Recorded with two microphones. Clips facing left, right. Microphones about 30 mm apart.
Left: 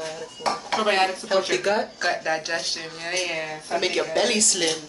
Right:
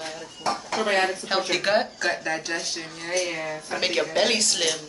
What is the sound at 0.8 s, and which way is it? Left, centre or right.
Speech, left.